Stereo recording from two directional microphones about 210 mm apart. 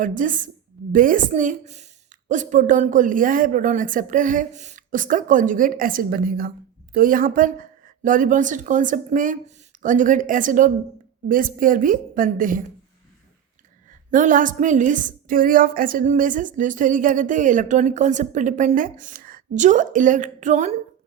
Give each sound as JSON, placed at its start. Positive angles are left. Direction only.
{"t": 0.0, "sound": "a woman's voice", "side_deg": -40}
{"t": 14.1, "sound": "a woman's voice", "side_deg": -35}